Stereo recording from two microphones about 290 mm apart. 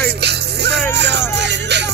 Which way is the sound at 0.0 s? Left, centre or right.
Right.